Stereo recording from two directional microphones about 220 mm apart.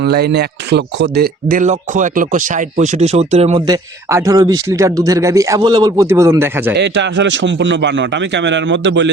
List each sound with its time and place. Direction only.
0.0 s speech: 45° right (ahead or behind); by 3.6 s 30° right (ahead or behind)
3.7 s speech: 15° right (ahead or behind)
6.7 s a man's voice: 55° right (ahead or behind)